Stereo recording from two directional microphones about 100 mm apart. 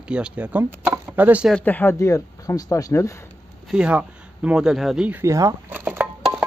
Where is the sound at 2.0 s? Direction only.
30° left (ahead or behind).